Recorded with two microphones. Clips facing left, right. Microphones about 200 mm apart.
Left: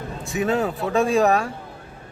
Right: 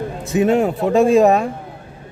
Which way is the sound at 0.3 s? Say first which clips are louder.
Right 7 dB; 20° right (ahead or behind).